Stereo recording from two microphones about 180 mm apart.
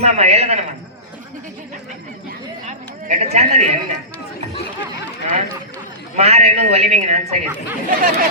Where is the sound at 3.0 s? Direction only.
40° right (ahead or behind).